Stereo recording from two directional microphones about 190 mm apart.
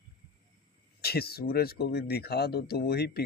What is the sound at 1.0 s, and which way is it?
Speech, 55° left (ahead or behind).